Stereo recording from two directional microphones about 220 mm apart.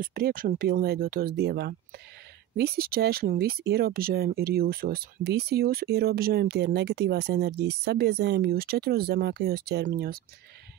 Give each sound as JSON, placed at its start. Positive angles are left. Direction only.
{"t": 0.0, "sound": "speech", "side_deg": -40}